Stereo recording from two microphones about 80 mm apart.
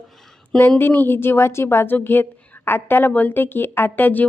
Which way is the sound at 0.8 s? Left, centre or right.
Left.